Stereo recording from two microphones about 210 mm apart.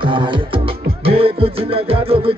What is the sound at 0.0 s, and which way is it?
Music, 25° right (ahead or behind).